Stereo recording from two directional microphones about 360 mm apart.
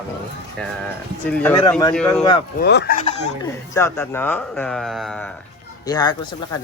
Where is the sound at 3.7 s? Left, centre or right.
Centre.